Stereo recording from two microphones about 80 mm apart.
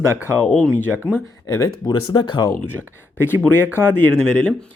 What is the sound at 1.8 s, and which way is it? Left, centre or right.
Speech, left.